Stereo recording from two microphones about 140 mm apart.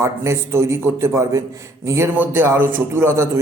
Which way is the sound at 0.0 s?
20° right (ahead or behind).